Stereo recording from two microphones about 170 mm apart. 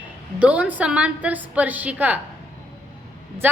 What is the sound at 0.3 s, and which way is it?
A woman's voice, 5° right (ahead or behind).